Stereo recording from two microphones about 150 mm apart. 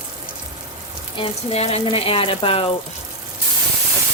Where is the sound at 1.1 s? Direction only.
40° left (ahead or behind).